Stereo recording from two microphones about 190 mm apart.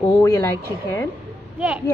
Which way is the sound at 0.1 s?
15° left (ahead or behind).